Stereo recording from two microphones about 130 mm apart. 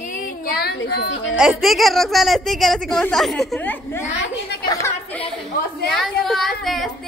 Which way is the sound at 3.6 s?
15° left (ahead or behind).